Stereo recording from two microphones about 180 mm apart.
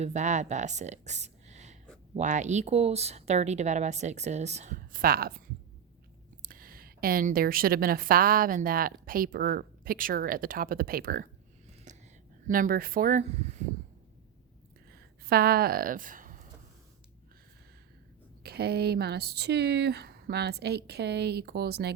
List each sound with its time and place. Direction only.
0.0 s a woman's voice: 40° right (ahead or behind); by 5.4 s 55° right (ahead or behind)
6.4 s a woman's voice: 50° right (ahead or behind)
11.9 s whispering: 40° right (ahead or behind)
12.5 s a woman's voice: 50° right (ahead or behind)
14.9 s a sound: 60° right (ahead or behind)
18.4 s speech: 60° right (ahead or behind)